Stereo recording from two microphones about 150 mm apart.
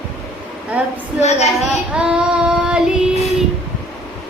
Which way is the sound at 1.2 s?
45° left (ahead or behind).